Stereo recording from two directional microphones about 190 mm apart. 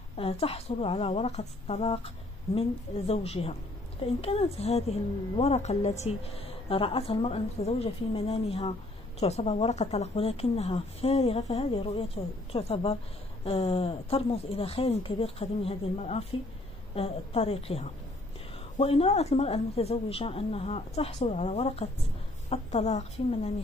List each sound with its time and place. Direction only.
0.2 s a woman's voice: 30° left (ahead or behind)